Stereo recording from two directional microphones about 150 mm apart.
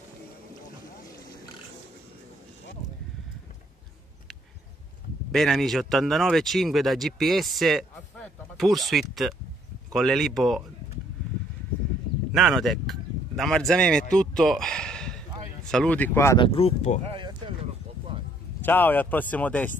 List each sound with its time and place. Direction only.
5.3 s speech: centre (ahead or behind)
12.3 s speech: centre (ahead or behind); by 16.3 s 15° left (ahead or behind)
16.3 s speech: 40° left (ahead or behind)
17.0 s a sound: 35° right (ahead or behind)
18.6 s speech: 15° left (ahead or behind)